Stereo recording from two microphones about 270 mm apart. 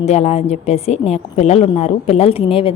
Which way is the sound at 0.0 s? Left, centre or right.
Left.